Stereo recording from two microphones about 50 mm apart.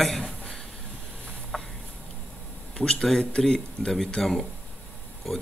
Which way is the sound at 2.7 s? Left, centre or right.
Centre.